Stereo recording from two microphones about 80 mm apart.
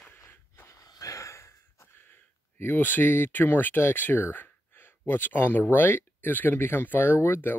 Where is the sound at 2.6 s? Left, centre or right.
Left.